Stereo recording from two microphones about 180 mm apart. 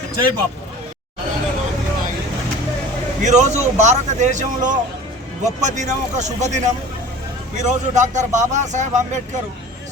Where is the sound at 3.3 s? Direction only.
40° right (ahead or behind).